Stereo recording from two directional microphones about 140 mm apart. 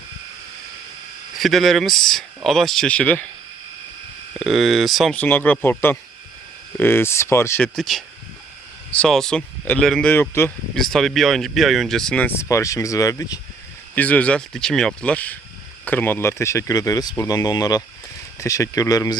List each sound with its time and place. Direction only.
1.4 s speech: centre (ahead or behind)
4.4 s speech: centre (ahead or behind)
5.2 s speech: 10° left (ahead or behind)
7.6 s speech: centre (ahead or behind)
10.8 s speech: centre (ahead or behind); by 13.4 s 25° left (ahead or behind)
13.9 s speech: 10° left (ahead or behind); by 19.1 s 25° left (ahead or behind)